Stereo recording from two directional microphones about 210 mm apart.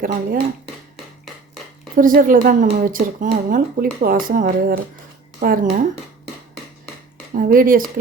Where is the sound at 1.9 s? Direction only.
40° right (ahead or behind).